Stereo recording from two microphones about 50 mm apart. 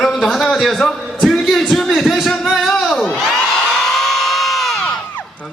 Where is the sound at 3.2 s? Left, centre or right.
Centre.